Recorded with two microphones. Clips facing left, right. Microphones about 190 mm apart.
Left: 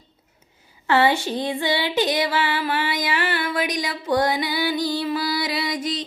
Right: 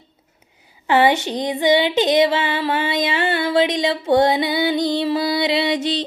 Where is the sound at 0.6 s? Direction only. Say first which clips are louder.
Right 3 dB; 15° right (ahead or behind).